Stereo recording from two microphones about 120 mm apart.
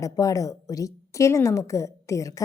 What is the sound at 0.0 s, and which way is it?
A woman's voice, 30° left (ahead or behind).